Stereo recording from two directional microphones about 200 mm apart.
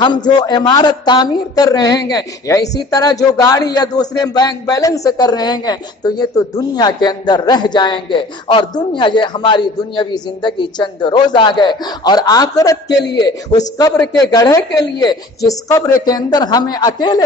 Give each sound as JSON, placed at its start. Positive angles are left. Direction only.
{"t": 0.0, "sound": "a man's voice", "side_deg": 20}